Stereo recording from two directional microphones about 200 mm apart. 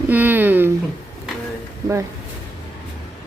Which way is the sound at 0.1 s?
10° right (ahead or behind).